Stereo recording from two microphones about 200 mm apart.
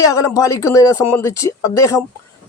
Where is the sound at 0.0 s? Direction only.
15° left (ahead or behind).